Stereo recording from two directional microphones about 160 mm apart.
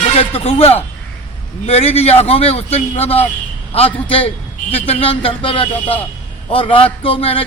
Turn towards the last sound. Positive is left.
turn(degrees=35)  # may be behind; listen again after turning